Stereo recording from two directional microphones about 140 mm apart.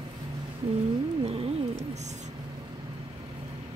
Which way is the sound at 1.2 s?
45° right (ahead or behind).